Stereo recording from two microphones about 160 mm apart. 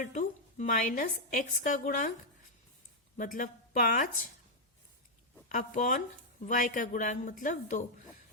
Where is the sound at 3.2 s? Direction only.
55° left (ahead or behind).